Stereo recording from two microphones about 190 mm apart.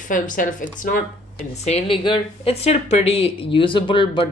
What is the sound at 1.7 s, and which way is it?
Speech, 30° left (ahead or behind).